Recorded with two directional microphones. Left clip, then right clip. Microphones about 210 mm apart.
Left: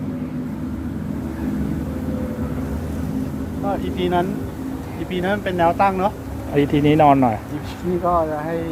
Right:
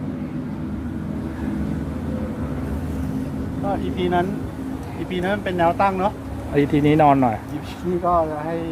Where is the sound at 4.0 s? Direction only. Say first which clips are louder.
Left 1 dB; 30° left (ahead or behind).